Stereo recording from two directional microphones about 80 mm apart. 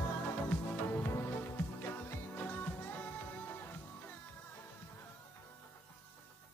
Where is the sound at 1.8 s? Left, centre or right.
Left.